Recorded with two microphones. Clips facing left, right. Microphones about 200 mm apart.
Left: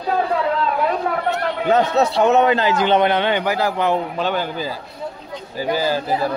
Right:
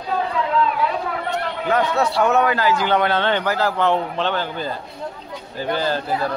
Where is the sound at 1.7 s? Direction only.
25° left (ahead or behind).